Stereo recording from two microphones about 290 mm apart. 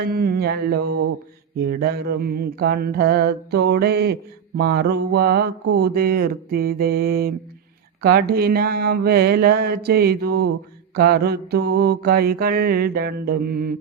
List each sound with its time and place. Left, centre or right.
0.0 s mantra: right